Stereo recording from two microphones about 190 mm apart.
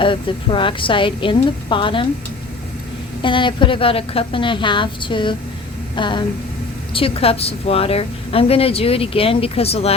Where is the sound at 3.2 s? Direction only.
25° left (ahead or behind).